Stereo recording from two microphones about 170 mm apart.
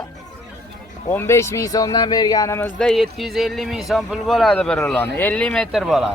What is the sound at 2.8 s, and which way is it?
Speech, centre (ahead or behind).